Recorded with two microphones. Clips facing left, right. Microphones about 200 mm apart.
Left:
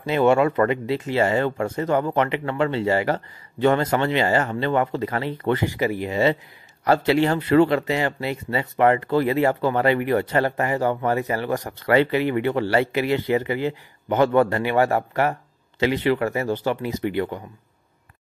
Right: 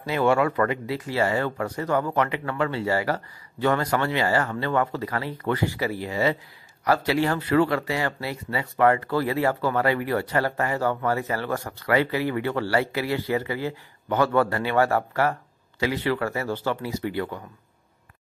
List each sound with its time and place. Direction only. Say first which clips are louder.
0.0 s speech: left 4 dB; 20° left (ahead or behind)